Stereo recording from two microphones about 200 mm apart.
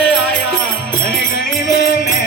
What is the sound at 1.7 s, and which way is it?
Music, 50° left (ahead or behind).